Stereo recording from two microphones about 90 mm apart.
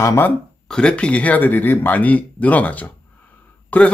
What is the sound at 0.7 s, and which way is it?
Speech, 10° left (ahead or behind).